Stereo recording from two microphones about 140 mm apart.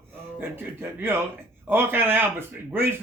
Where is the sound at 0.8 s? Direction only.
15° right (ahead or behind).